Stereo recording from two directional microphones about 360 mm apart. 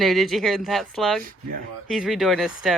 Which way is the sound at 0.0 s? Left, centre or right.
Centre.